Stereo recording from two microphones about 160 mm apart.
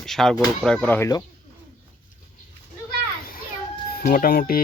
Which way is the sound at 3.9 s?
65° left (ahead or behind).